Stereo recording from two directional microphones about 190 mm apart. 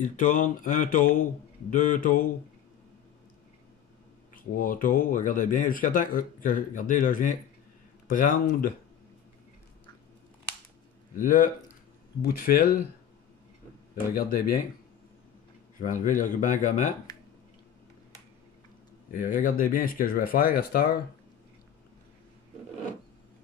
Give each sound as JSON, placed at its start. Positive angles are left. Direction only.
{"t": 0.0, "sound": "speech", "side_deg": 40}
{"t": 4.4, "sound": "speech", "side_deg": 45}
{"t": 11.1, "sound": "speech", "side_deg": 45}
{"t": 14.1, "sound": "speech", "side_deg": 50}
{"t": 15.8, "sound": "speech", "side_deg": 45}
{"t": 19.1, "sound": "speech", "side_deg": 45}